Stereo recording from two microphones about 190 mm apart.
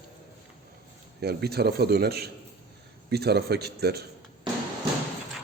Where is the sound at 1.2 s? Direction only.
55° right (ahead or behind).